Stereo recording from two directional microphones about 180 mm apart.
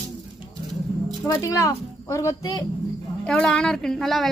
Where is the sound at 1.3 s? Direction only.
15° left (ahead or behind).